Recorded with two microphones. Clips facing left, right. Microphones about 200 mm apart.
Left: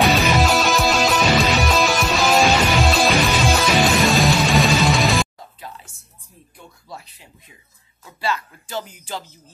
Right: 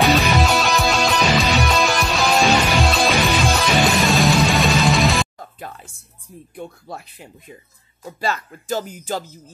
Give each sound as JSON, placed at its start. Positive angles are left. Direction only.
{"t": 0.0, "sound": "music", "side_deg": 0}
{"t": 6.5, "sound": "speech", "side_deg": -55}